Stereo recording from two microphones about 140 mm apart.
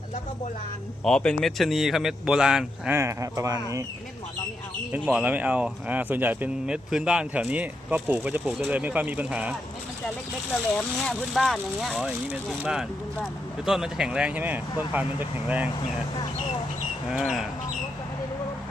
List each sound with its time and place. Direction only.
1.0 s speech: 5° left (ahead or behind)
2.9 s speech: 20° right (ahead or behind)
4.9 s speech: 10° right (ahead or behind)
10.5 s speech: centre (ahead or behind)
17.1 s speech: 5° right (ahead or behind)